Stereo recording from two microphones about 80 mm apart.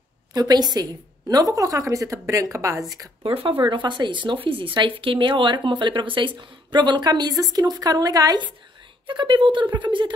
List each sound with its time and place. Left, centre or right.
0.3 s a woman's voice: right
3.6 s a woman's voice: right
9.0 s speech: right